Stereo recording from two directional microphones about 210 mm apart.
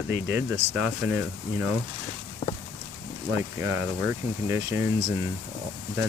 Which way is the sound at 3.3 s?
10° right (ahead or behind).